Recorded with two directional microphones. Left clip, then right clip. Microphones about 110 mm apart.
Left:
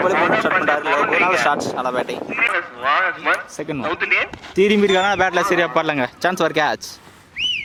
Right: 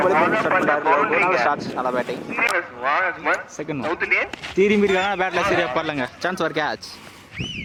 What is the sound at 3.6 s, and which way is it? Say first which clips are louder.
Speech: left 2 dB; 15° left (ahead or behind).